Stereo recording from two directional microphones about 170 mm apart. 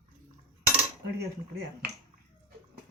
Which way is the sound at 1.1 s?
70° right (ahead or behind).